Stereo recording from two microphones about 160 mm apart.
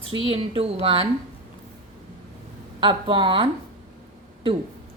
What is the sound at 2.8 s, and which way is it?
Speech, 30° right (ahead or behind).